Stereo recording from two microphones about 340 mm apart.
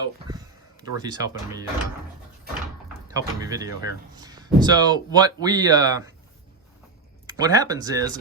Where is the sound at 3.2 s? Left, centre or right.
Centre.